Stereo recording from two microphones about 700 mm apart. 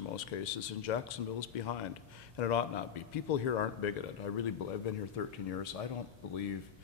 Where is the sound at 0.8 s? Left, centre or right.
Left.